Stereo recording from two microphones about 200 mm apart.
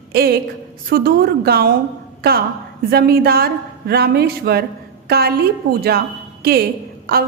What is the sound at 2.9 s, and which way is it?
A woman's voice, 50° right (ahead or behind).